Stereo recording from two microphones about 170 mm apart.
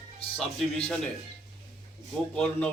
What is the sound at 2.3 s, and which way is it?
Speech, 5° left (ahead or behind).